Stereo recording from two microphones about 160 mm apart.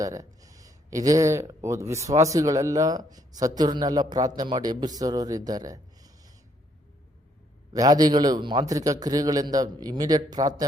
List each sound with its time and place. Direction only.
0.0 s speech: 20° right (ahead or behind)
7.7 s a man's voice: 25° right (ahead or behind)